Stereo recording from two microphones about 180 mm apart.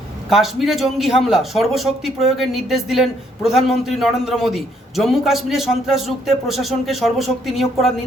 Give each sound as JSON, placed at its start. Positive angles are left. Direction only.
{"t": 0.3, "sound": "speech", "side_deg": 0}